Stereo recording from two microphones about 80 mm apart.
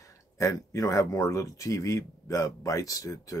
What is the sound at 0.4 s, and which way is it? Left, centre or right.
Speech, left.